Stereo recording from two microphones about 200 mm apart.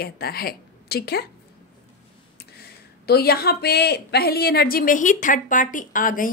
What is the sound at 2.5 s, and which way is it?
Speech, 50° left (ahead or behind).